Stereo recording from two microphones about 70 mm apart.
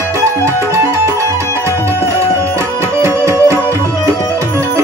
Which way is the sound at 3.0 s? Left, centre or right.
Right.